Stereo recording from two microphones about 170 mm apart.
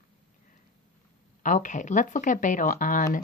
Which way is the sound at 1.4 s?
50° left (ahead or behind).